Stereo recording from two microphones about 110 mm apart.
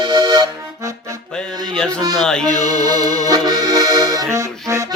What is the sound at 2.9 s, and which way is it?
Accordion, 35° right (ahead or behind).